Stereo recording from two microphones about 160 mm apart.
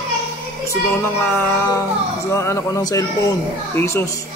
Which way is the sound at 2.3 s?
15° left (ahead or behind).